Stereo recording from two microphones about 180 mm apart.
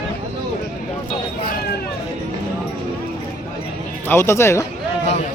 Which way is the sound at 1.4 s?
60° left (ahead or behind).